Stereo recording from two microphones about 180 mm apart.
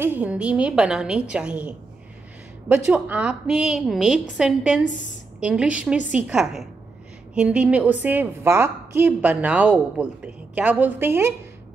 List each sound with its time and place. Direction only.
0.0 s a woman's voice: 10° right (ahead or behind)